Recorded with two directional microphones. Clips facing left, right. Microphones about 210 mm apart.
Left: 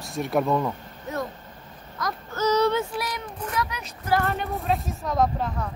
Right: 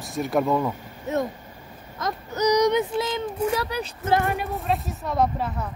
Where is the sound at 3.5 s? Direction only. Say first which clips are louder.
Right 4 dB; 30° right (ahead or behind).